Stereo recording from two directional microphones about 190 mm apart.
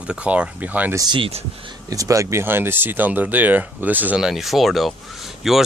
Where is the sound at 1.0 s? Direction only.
25° right (ahead or behind).